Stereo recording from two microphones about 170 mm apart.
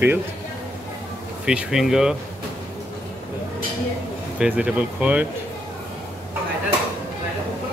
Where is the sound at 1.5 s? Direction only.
5° right (ahead or behind).